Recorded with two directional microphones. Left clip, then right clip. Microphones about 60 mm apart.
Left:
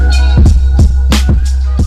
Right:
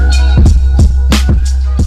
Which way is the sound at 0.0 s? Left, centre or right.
Centre.